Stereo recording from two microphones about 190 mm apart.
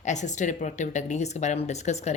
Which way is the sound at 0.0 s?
40° left (ahead or behind).